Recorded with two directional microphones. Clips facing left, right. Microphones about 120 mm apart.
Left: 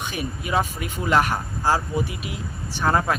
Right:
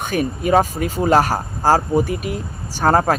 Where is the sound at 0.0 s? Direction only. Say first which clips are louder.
Right 9 dB; 50° right (ahead or behind).